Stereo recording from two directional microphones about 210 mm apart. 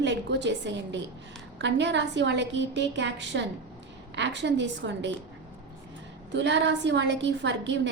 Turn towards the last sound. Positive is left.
turn(degrees=-60)  # may be behind; listen again after turning